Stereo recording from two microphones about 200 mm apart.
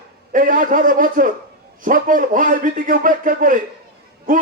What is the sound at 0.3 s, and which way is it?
A man's voice, 40° right (ahead or behind).